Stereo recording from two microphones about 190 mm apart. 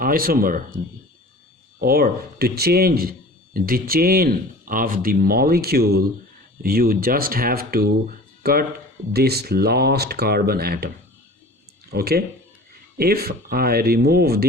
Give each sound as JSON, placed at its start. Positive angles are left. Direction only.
{"t": 0.0, "sound": "a man's voice", "side_deg": -50}
{"t": 1.8, "sound": "a man's voice", "side_deg": -50}